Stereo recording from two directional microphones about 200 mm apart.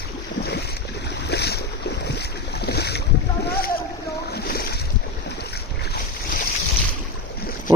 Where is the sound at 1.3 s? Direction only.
55° left (ahead or behind).